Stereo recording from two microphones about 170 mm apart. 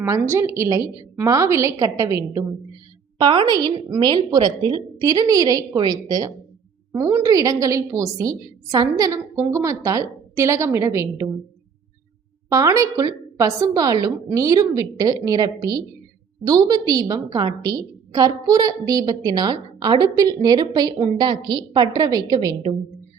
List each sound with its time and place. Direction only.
0.0 s a woman's voice: 15° right (ahead or behind)
12.5 s a woman's voice: 20° right (ahead or behind)